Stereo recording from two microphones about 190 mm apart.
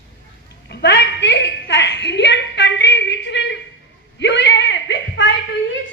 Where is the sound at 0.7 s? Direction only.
60° left (ahead or behind).